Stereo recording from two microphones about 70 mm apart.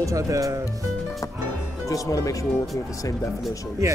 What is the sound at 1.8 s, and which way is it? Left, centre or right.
Speech, left.